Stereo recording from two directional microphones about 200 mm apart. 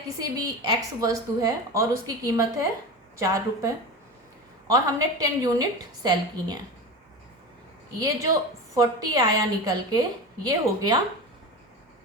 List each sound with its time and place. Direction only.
0.2 s a woman's voice: 20° right (ahead or behind)
4.7 s a woman's voice: 20° right (ahead or behind)
7.9 s a woman's voice: 15° right (ahead or behind)